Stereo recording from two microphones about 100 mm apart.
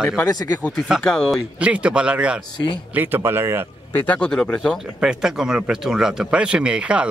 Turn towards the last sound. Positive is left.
turn(degrees=-10)  # may be behind; listen again after turning